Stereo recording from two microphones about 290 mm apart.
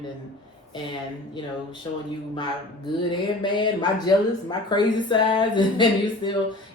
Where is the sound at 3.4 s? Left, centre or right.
Centre.